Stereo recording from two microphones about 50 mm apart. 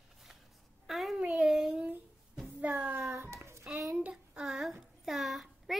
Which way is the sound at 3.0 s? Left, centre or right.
Right.